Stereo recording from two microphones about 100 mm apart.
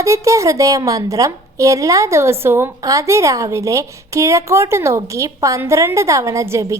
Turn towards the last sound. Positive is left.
turn(degrees=-30)  # may be behind; listen again after turning